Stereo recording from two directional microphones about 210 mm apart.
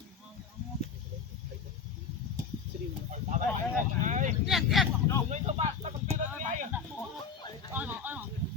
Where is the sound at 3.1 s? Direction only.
35° right (ahead or behind).